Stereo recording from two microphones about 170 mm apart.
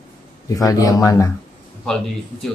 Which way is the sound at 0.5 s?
20° left (ahead or behind).